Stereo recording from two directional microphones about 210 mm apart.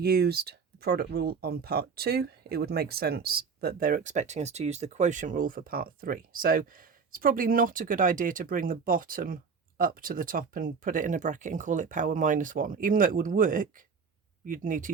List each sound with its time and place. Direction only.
0.0 s speech: 50° right (ahead or behind)